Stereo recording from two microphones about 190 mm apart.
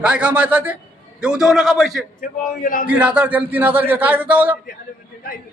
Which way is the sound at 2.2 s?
50° left (ahead or behind).